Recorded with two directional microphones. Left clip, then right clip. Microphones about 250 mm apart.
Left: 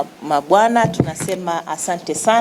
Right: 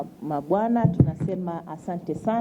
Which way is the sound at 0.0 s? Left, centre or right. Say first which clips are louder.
Left 11 dB; centre.